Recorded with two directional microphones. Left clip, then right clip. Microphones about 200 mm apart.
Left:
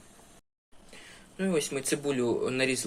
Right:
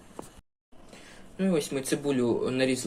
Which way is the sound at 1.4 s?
10° left (ahead or behind).